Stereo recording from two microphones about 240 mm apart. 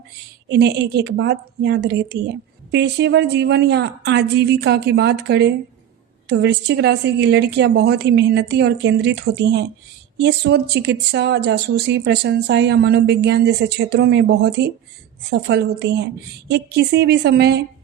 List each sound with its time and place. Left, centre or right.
0.4 s speech: right